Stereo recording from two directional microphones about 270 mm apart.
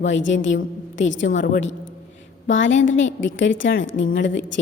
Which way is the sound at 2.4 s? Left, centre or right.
Left.